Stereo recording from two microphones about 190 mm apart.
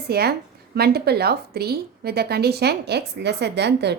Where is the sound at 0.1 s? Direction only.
55° right (ahead or behind).